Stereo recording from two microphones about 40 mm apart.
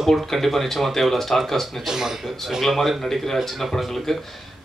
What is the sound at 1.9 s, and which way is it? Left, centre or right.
Speech, centre.